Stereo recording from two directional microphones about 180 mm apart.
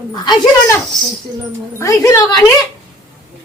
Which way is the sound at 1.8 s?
15° left (ahead or behind).